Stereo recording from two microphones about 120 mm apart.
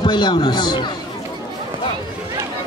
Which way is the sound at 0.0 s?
40° left (ahead or behind).